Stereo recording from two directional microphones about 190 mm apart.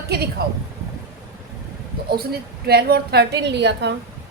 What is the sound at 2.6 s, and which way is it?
A woman's voice, 55° right (ahead or behind).